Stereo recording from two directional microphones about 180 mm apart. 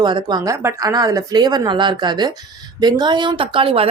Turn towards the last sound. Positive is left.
turn(degrees=-30)  # may be behind; listen again after turning